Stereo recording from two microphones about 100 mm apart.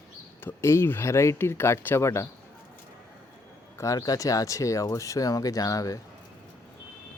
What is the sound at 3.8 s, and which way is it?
Speech, 35° left (ahead or behind).